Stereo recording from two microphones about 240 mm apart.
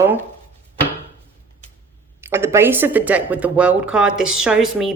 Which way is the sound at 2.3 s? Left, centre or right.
Centre.